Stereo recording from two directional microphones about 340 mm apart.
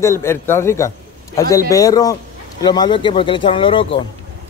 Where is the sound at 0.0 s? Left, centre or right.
Centre.